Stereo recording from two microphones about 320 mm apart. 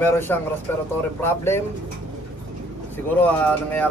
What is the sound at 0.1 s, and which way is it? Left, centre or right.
A man's voice, centre.